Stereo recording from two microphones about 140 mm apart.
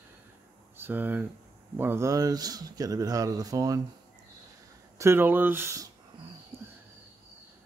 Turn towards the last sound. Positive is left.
turn(degrees=-20)  # may be behind; listen again after turning